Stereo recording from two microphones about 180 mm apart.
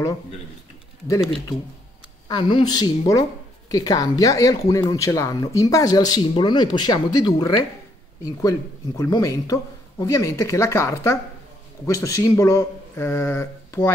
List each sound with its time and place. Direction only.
2.2 s speech: 25° left (ahead or behind)